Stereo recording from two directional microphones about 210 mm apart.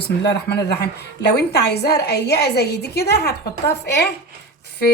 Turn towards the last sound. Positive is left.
turn(degrees=50)  # may be behind; listen again after turning